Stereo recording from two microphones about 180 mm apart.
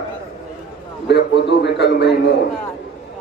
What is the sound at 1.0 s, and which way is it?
A man's voice, 70° left (ahead or behind).